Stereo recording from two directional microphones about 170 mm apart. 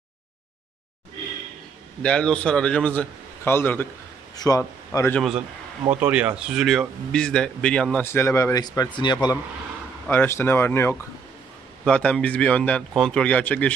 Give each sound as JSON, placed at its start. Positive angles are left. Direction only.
{"t": 2.0, "sound": "a man's voice", "side_deg": 5}
{"t": 5.9, "sound": "a man's voice", "side_deg": -10}